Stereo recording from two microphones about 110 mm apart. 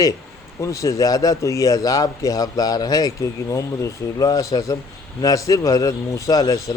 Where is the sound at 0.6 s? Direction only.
30° left (ahead or behind).